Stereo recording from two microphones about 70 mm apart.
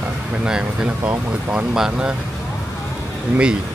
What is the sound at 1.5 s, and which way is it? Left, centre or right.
Speech, centre.